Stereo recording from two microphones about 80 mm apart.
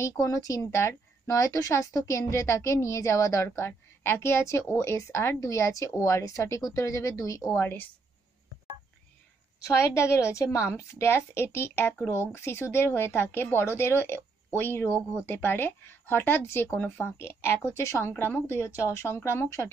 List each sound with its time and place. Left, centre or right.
0.0 s a woman's voice: left
7.6 s speech: left
9.6 s a woman's voice: left
18.0 s a woman's voice: left